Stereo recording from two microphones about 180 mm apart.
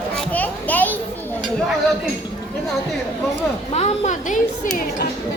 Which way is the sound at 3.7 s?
40° left (ahead or behind).